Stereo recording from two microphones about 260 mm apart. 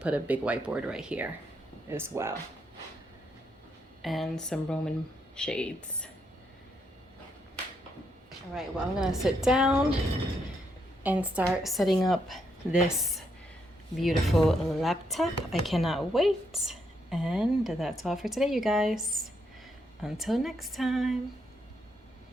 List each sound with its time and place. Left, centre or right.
0.0 s speech: centre
4.0 s speech: centre
8.5 s speech: centre
11.0 s a woman's voice: centre